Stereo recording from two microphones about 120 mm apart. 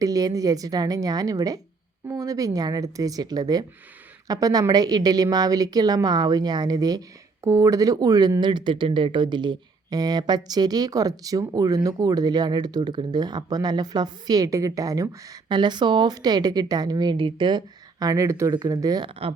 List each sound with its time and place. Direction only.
0.0 s speech: 30° right (ahead or behind)
18.0 s speech: 25° right (ahead or behind)